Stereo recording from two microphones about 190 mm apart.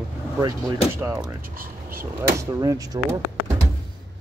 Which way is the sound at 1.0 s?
15° right (ahead or behind).